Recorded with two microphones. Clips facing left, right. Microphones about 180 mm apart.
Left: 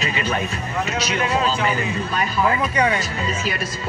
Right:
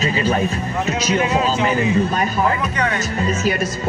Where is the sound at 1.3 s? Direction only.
15° right (ahead or behind).